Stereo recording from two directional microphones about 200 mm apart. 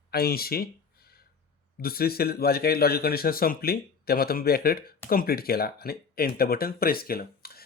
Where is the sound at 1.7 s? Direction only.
50° left (ahead or behind).